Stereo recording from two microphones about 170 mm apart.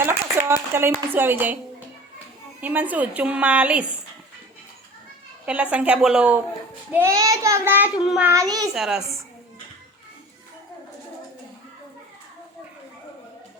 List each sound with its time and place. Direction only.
0.0 s speech: 15° right (ahead or behind)
2.6 s a woman's voice: 10° right (ahead or behind)
5.7 s a woman's voice: 5° right (ahead or behind)
6.9 s a woman's voice: 15° right (ahead or behind); by 8.3 s centre (ahead or behind)
8.3 s a child's voice: 20° right (ahead or behind)
8.7 s a child's voice: 5° right (ahead or behind)